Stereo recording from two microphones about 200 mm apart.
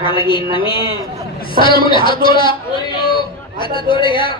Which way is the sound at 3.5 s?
25° left (ahead or behind).